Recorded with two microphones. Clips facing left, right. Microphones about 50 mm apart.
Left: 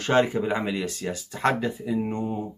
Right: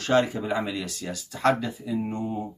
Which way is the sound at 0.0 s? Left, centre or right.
Left.